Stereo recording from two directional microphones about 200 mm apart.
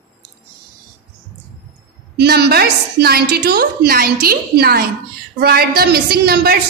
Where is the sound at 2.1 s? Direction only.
55° right (ahead or behind).